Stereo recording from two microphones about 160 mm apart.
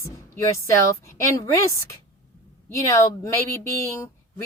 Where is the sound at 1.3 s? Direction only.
20° left (ahead or behind).